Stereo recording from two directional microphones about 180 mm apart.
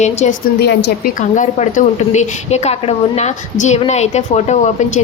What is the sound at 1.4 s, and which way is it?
A woman's voice, 40° left (ahead or behind).